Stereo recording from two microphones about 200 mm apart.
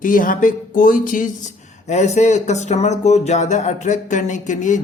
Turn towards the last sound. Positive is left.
turn(degrees=40)  # may be behind; listen again after turning